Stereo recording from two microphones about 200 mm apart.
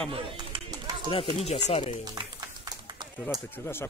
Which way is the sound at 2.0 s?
20° right (ahead or behind).